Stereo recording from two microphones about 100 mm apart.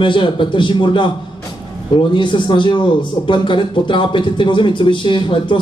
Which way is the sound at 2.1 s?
55° left (ahead or behind).